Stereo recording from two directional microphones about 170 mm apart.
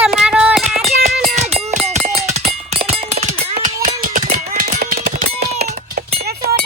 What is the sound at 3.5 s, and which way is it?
Clip-clop, 50° right (ahead or behind).